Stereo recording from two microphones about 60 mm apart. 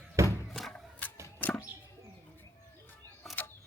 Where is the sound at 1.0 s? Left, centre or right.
Left.